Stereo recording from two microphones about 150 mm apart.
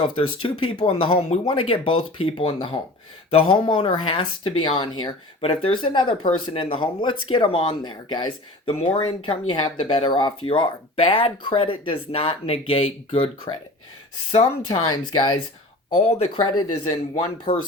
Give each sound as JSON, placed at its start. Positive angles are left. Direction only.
{"t": 0.0, "sound": "speech", "side_deg": 35}
{"t": 8.7, "sound": "speech", "side_deg": 45}
{"t": 9.2, "sound": "speech", "side_deg": 35}
{"t": 14.3, "sound": "speech", "side_deg": 30}
{"t": 16.0, "sound": "speech", "side_deg": 40}
{"t": 17.5, "sound": "speech", "side_deg": 55}